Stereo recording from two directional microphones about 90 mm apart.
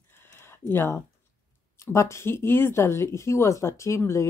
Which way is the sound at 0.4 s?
25° left (ahead or behind).